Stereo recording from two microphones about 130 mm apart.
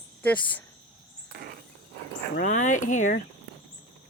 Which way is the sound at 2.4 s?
75° left (ahead or behind).